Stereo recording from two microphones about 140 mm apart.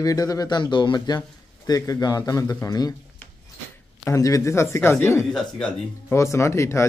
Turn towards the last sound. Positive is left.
turn(degrees=20)  # may be behind; listen again after turning